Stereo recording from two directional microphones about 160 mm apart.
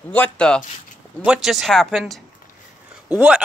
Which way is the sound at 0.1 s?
5° left (ahead or behind).